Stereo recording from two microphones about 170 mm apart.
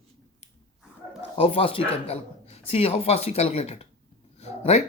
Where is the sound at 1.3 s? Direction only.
35° left (ahead or behind).